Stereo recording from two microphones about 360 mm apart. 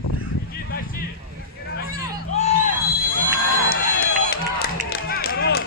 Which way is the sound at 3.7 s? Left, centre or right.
Left.